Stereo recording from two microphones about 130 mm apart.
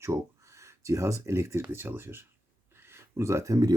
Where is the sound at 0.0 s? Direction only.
25° right (ahead or behind).